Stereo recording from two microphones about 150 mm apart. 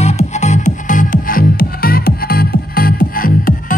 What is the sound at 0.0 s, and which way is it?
Music, 45° left (ahead or behind).